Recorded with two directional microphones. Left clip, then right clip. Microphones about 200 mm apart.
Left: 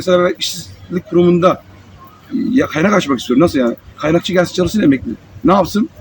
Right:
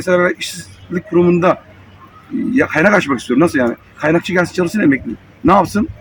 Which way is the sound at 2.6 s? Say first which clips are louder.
Right 2 dB; 5° right (ahead or behind).